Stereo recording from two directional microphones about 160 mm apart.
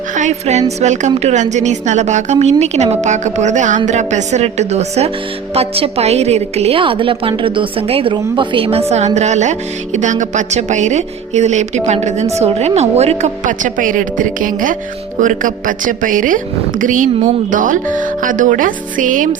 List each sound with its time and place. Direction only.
0.2 s music: 45° right (ahead or behind)
0.8 s a woman's voice: 45° right (ahead or behind)